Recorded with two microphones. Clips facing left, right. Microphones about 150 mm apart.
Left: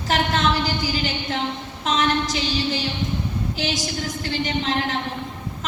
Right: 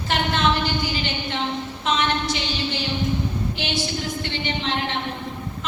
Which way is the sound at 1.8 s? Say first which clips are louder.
Left 2 dB; 40° left (ahead or behind).